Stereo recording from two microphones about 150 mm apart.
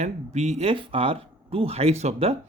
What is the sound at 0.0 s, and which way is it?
Speech, 45° right (ahead or behind).